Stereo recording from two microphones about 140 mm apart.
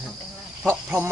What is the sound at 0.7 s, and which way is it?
Speech, 15° right (ahead or behind).